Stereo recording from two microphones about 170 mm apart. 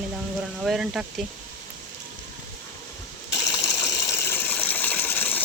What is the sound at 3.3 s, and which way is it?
Water, 20° left (ahead or behind).